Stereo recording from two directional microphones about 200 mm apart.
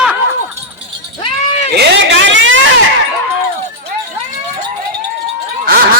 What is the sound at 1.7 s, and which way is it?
Vehicle, 55° right (ahead or behind).